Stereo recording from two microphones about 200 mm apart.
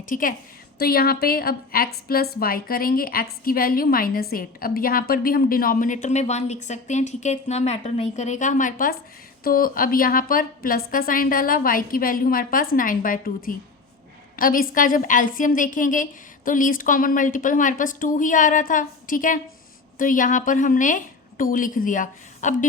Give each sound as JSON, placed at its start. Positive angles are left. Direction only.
{"t": 0.1, "sound": "a woman's voice", "side_deg": 45}